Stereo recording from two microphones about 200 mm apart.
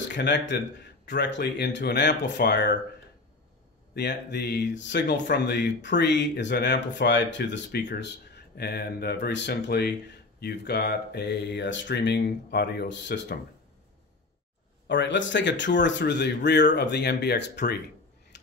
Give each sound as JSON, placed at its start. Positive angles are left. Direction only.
{"t": 0.1, "sound": "speech", "side_deg": 60}
{"t": 3.9, "sound": "speech", "side_deg": 55}
{"t": 14.9, "sound": "speech", "side_deg": 65}
{"t": 18.3, "sound": "a sound", "side_deg": 60}